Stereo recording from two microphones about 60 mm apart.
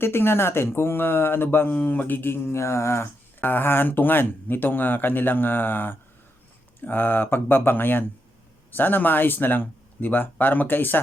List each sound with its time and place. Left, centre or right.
0.0 s speech: left
1.7 s speech: left
3.4 s speech: left